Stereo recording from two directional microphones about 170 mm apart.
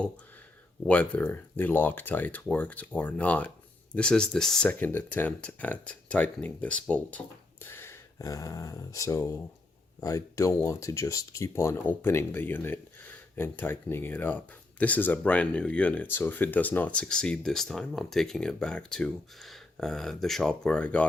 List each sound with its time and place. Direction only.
0.9 s speech: 10° left (ahead or behind)